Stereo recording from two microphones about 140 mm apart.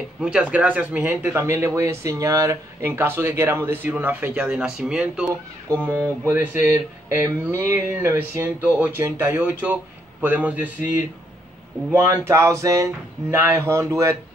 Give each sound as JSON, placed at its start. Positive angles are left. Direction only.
{"t": 0.2, "sound": "speech", "side_deg": -10}